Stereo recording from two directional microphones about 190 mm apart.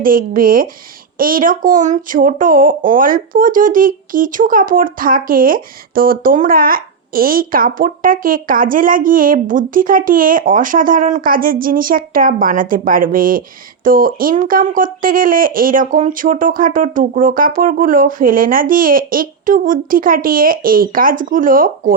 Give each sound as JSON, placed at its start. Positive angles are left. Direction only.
{"t": 0.0, "sound": "speech", "side_deg": -45}